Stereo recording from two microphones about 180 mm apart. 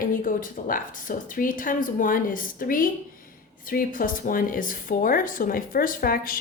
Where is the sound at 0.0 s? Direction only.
50° left (ahead or behind).